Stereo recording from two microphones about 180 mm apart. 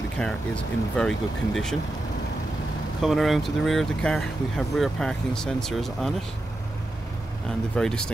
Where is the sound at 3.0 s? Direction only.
Centre (ahead or behind).